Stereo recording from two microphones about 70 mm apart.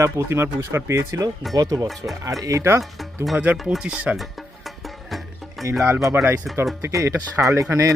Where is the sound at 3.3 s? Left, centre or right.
Right.